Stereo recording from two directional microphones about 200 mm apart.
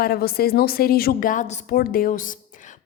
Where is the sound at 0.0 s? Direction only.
50° left (ahead or behind).